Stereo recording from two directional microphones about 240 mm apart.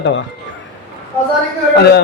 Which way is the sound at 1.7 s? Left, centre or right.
Left.